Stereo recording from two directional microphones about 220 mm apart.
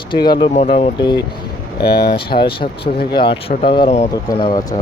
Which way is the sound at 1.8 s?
45° left (ahead or behind).